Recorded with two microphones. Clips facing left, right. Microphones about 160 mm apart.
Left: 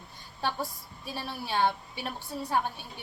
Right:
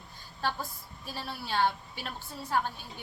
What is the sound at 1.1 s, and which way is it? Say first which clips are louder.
A woman's voice: left 2 dB; 15° left (ahead or behind).